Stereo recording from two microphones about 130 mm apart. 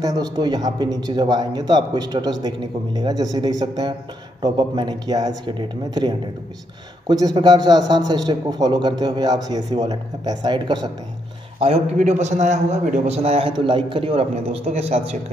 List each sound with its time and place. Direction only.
0.0 s a man's voice: 30° right (ahead or behind)
7.3 s a man's voice: 30° right (ahead or behind)
11.6 s a man's voice: 55° right (ahead or behind)
13.5 s a man's voice: 40° right (ahead or behind)